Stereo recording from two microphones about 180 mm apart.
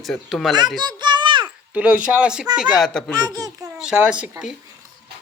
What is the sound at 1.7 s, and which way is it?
A man's voice, 5° right (ahead or behind).